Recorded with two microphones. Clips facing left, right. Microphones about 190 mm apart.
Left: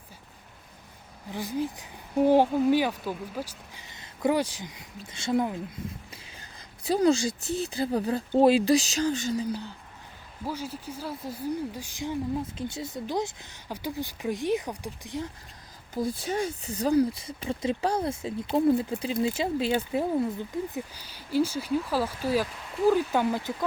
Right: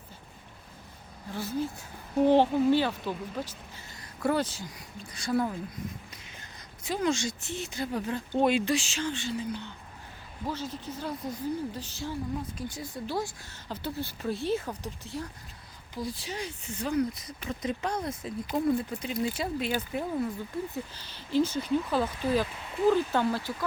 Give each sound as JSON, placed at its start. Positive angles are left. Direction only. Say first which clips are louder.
{"t": 1.3, "sound": "speech", "louder": "left 2 dB", "side_deg": 15}
{"t": 3.9, "sound": "speech", "louder": "left 3 dB", "side_deg": 20}
{"t": 6.8, "sound": "speech", "louder": "left 6 dB", "side_deg": 35}
{"t": 10.4, "sound": "speech", "louder": "left 1 dB", "side_deg": 10}
{"t": 16.0, "sound": "speech", "louder": "left 7 dB", "side_deg": 50}
{"t": 20.7, "sound": "speech", "louder": "left 2 dB", "side_deg": 10}